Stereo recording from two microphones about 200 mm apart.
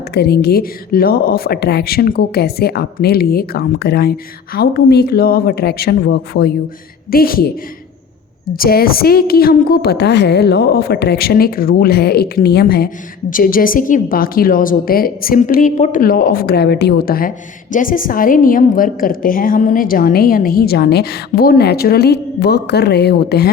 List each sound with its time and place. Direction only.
0.1 s a woman's voice: 55° left (ahead or behind)